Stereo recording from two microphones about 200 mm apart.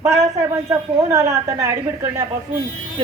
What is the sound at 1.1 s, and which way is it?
Speech, 15° right (ahead or behind).